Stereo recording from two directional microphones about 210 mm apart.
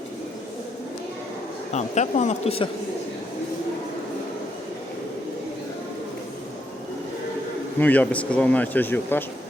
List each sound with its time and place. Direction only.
1.7 s speech: 35° left (ahead or behind)
7.8 s speech: 10° left (ahead or behind)